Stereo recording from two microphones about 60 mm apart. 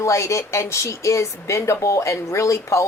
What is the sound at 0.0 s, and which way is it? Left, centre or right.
A woman's voice, left.